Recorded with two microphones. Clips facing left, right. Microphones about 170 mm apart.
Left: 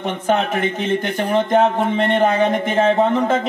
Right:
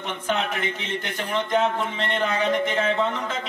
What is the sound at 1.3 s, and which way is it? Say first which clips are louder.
Music: left 7 dB; 50° left (ahead or behind).